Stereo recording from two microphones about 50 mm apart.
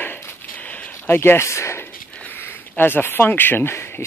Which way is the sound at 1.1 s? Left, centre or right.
Left.